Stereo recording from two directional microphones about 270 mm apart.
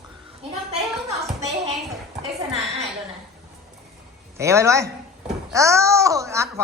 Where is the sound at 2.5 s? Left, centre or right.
Right.